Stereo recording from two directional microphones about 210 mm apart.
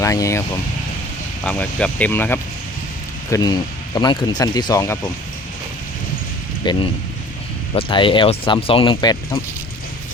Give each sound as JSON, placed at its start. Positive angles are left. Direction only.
{"t": 0.0, "sound": "speech", "side_deg": 15}
{"t": 1.5, "sound": "speech", "side_deg": 5}
{"t": 6.6, "sound": "speech", "side_deg": 20}